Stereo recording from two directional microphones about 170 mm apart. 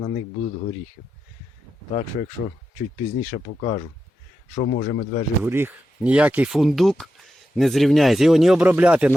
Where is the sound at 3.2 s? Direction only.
35° left (ahead or behind).